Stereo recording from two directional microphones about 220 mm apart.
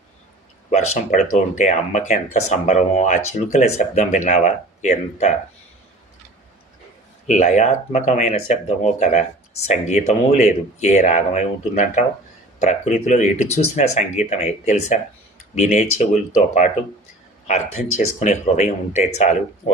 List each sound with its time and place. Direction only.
0.7 s speech: 30° left (ahead or behind)
7.3 s speech: 35° left (ahead or behind)